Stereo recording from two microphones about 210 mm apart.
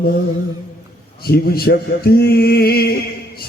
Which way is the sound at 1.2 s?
45° left (ahead or behind).